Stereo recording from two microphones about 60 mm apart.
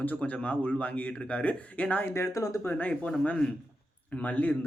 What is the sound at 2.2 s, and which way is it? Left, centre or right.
Speech, left.